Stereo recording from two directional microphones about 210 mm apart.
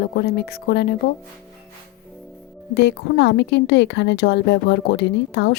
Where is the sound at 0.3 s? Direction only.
50° left (ahead or behind).